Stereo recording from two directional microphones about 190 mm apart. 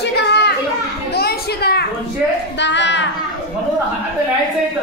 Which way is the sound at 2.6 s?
70° left (ahead or behind).